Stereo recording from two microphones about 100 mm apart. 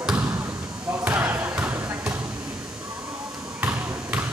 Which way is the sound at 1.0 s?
15° right (ahead or behind).